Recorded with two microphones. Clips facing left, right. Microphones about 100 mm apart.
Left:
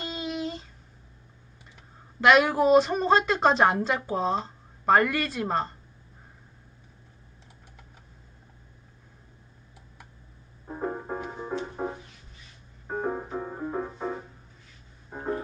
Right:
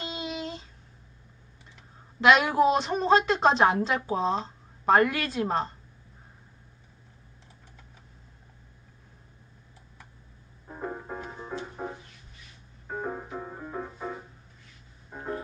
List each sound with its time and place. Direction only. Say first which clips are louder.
0.0 s a sound: left 2 dB; centre (ahead or behind)
2.2 s a woman's voice: left 1 dB; centre (ahead or behind)
10.7 s music: left 4 dB; 20° left (ahead or behind)
12.9 s piano: left 4 dB; 20° left (ahead or behind)
13.3 s music: left 5 dB; 20° left (ahead or behind)